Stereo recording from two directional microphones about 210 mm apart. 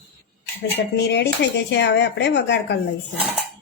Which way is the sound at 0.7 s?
55° left (ahead or behind).